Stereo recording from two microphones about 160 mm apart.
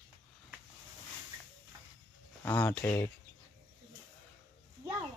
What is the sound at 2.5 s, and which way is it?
Speech, 10° left (ahead or behind).